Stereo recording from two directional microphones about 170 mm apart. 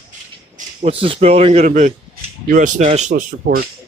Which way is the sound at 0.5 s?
45° right (ahead or behind).